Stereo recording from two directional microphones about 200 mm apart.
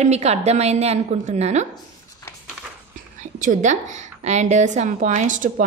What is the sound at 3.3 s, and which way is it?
A woman's voice, 40° right (ahead or behind).